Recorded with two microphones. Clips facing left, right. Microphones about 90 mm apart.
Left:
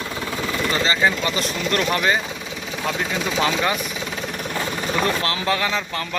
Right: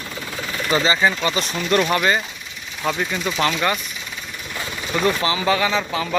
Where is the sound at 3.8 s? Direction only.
85° left.